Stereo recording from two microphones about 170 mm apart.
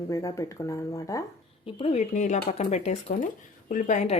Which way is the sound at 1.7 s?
35° left (ahead or behind).